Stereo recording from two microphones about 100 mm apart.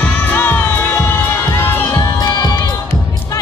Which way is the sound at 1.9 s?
40° left (ahead or behind).